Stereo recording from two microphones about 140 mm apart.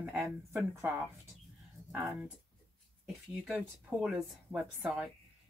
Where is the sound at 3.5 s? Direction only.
10° right (ahead or behind).